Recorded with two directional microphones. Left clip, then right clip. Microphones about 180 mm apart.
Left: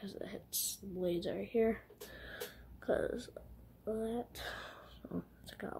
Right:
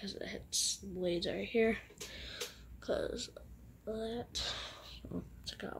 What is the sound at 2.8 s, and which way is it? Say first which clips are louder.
Speech: left 1 dB; 15° left (ahead or behind).